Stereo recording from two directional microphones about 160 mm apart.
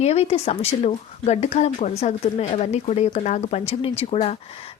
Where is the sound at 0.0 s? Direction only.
40° left (ahead or behind).